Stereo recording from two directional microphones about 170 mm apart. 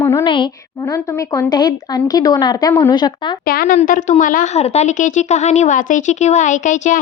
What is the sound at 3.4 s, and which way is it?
Speech, 60° left (ahead or behind).